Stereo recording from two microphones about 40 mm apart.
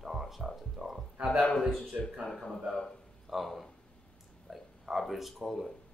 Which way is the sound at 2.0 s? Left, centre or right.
Left.